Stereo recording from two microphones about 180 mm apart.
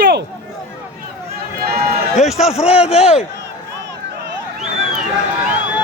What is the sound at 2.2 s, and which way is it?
Speech, centre (ahead or behind).